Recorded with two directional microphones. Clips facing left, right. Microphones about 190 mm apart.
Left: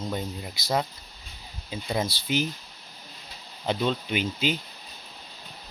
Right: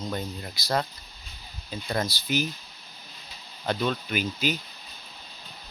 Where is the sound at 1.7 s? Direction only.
10° left (ahead or behind).